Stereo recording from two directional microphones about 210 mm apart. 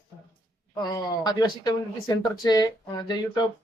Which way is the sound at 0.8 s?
20° left (ahead or behind).